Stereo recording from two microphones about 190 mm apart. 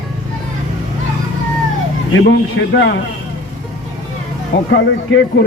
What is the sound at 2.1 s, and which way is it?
Speech, 85° left.